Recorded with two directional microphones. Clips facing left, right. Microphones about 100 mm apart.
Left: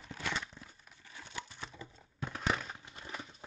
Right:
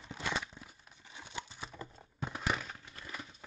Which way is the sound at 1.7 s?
45° right (ahead or behind).